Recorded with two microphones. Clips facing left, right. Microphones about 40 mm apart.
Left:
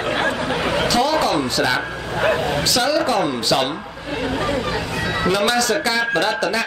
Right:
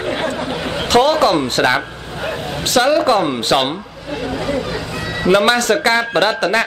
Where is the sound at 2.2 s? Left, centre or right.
Left.